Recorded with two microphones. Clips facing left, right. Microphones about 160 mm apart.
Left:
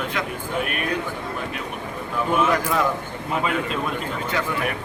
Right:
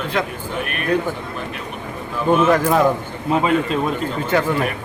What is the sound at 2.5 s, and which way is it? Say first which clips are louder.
Speech: right 6 dB; 50° right (ahead or behind).